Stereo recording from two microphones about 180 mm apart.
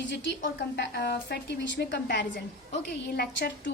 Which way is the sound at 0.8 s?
65° left (ahead or behind).